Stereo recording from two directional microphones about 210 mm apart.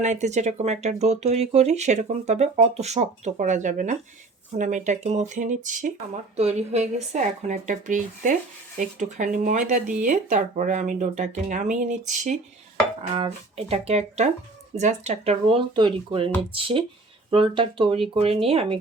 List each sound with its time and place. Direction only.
0.0 s speech: 35° right (ahead or behind)